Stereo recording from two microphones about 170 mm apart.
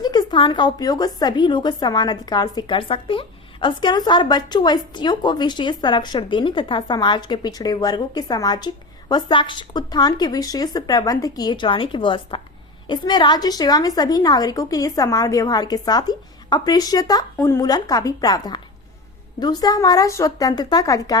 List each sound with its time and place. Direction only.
0.0 s a woman's voice: 25° left (ahead or behind)